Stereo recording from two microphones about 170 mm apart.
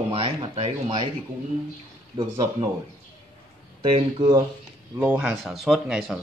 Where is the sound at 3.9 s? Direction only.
25° right (ahead or behind).